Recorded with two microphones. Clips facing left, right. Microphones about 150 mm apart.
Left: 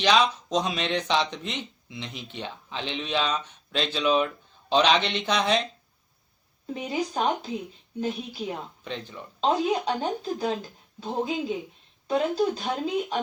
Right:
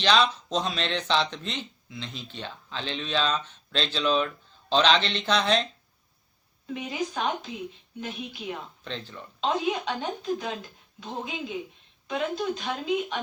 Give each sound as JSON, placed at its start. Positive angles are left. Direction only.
{"t": 0.0, "sound": "speech", "side_deg": 10}
{"t": 6.7, "sound": "speech", "side_deg": 35}
{"t": 8.8, "sound": "speech", "side_deg": 10}
{"t": 9.4, "sound": "speech", "side_deg": 35}